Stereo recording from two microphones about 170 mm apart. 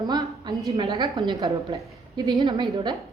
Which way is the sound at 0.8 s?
25° right (ahead or behind).